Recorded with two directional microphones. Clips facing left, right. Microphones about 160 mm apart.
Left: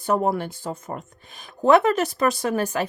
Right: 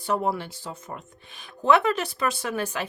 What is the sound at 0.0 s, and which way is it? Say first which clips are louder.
Speech: left 4 dB; 45° left (ahead or behind).